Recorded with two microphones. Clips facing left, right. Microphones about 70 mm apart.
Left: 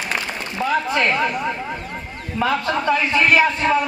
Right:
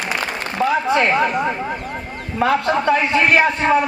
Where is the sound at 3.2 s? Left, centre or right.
Right.